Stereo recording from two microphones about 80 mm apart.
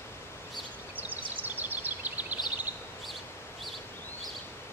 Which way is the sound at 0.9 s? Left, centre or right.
Right.